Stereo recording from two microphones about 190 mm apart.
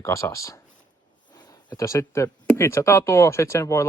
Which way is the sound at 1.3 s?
20° left (ahead or behind).